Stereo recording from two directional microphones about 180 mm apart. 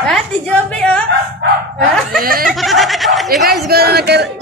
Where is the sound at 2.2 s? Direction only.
55° right (ahead or behind).